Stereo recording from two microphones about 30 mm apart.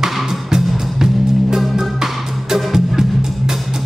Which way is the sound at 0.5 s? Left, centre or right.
Right.